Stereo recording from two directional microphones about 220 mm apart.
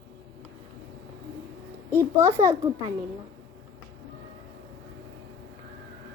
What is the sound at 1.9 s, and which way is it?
A child's voice, 10° right (ahead or behind).